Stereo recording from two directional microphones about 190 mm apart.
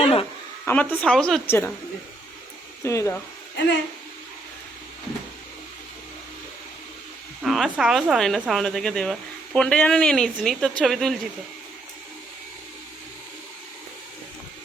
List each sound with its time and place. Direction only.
0.0 s a sound: 30° left (ahead or behind)
0.6 s speech: 10° left (ahead or behind)
2.8 s speech: 15° left (ahead or behind)
7.4 s speech: centre (ahead or behind)